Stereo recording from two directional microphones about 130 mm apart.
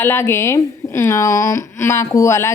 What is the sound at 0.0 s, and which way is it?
A woman's voice, 20° left (ahead or behind).